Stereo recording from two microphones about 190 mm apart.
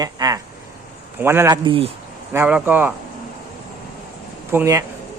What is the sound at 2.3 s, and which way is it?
Speech, 10° right (ahead or behind).